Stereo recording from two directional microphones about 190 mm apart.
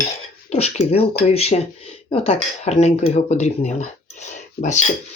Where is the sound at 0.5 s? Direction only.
35° left (ahead or behind).